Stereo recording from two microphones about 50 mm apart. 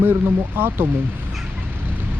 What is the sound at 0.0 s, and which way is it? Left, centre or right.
Speech, right.